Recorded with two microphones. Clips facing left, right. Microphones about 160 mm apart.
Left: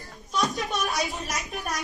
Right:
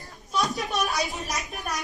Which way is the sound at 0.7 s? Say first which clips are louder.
Right 1 dB; centre (ahead or behind).